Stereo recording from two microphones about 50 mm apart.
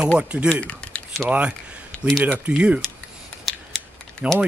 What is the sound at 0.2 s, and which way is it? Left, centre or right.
Speech, right.